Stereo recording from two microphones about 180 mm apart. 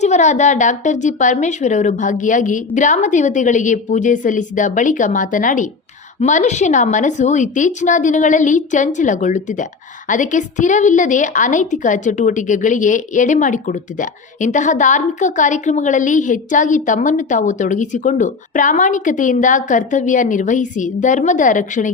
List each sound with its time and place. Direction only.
0.0 s a woman's voice: 40° left (ahead or behind)